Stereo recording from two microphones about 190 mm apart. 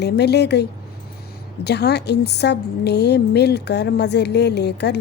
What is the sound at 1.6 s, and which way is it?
A woman's voice, 60° left (ahead or behind).